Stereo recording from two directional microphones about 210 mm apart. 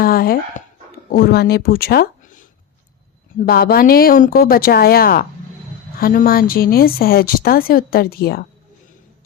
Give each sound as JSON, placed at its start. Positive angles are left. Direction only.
{"t": 0.0, "sound": "a woman's voice", "side_deg": 45}